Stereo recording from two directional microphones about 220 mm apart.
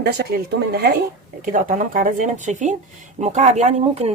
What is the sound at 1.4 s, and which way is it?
Speech, 35° right (ahead or behind).